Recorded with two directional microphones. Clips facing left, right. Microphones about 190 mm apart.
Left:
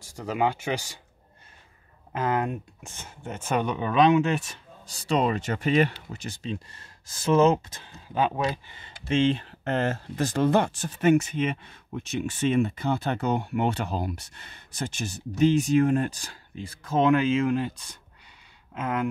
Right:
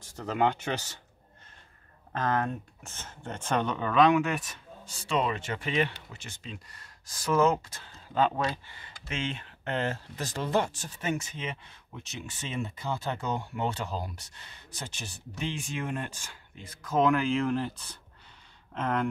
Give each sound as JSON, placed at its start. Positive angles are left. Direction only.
{"t": 0.0, "sound": "speech", "side_deg": 10}
{"t": 2.1, "sound": "speech", "side_deg": 10}